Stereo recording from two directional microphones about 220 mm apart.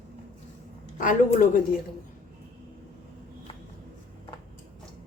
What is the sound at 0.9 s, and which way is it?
Speech, 35° left (ahead or behind).